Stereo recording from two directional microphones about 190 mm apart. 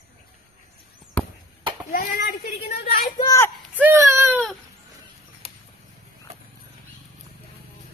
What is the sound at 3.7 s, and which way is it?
Baby cry, 10° right (ahead or behind).